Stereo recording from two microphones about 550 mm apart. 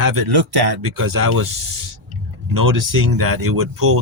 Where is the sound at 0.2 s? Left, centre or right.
Right.